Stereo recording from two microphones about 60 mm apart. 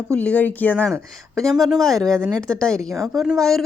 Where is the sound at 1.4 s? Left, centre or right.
Centre.